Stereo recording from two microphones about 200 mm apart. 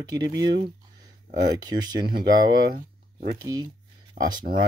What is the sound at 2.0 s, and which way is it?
Speech, 50° right (ahead or behind).